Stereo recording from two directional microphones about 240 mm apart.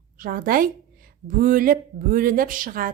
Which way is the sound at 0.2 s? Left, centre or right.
Right.